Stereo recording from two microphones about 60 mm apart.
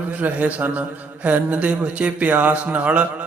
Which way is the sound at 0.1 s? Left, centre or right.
Right.